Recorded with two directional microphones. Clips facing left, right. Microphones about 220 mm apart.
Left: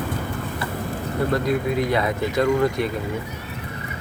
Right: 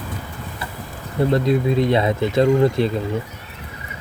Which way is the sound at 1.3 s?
25° right (ahead or behind).